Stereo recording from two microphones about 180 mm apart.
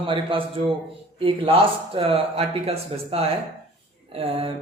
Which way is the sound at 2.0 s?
30° right (ahead or behind).